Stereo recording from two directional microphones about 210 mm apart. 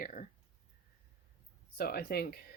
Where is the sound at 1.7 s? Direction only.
50° left (ahead or behind).